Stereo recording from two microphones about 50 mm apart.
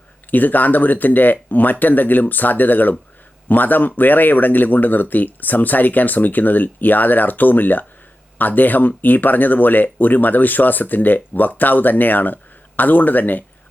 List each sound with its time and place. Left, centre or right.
0.3 s speech: left